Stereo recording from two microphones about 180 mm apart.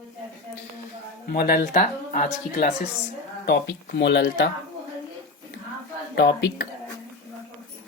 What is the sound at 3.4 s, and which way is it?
Speech, 65° left (ahead or behind).